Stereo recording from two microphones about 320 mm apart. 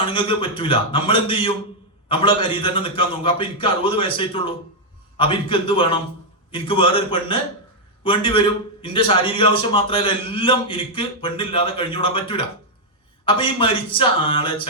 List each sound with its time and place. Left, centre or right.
0.0 s a man's voice: centre